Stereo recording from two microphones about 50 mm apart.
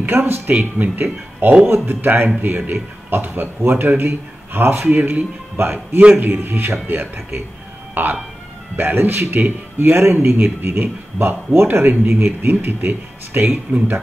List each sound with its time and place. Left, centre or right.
0.0 s speech: right
11.6 s speech: right